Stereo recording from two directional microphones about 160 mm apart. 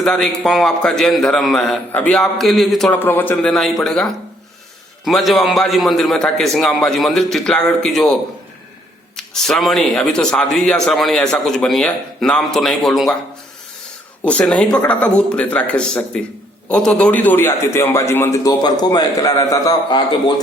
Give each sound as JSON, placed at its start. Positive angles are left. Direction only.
{"t": 0.0, "sound": "speech", "side_deg": 5}
{"t": 3.5, "sound": "speech", "side_deg": 0}
{"t": 9.1, "sound": "speech", "side_deg": 0}
{"t": 14.3, "sound": "a man's voice", "side_deg": 5}